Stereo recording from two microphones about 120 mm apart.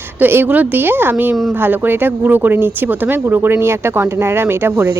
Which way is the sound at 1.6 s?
15° right (ahead or behind).